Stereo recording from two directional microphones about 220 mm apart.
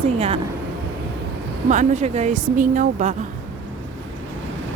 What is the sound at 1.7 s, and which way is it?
Speech, 35° right (ahead or behind).